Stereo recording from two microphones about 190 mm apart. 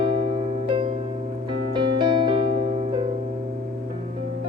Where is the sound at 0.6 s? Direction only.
25° right (ahead or behind).